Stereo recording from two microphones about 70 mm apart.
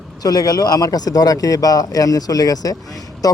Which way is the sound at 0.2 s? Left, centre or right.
Left.